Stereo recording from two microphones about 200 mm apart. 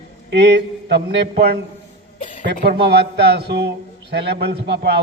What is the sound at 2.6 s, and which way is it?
A man's voice, 55° right (ahead or behind).